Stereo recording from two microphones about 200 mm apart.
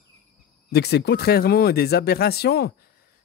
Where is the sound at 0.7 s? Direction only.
55° left (ahead or behind).